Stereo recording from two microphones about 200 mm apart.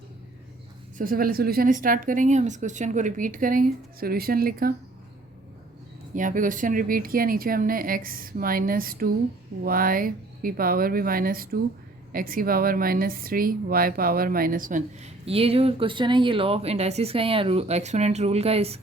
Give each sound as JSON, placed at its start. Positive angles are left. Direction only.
{"t": 0.9, "sound": "speech", "side_deg": -45}
{"t": 6.1, "sound": "speech", "side_deg": -40}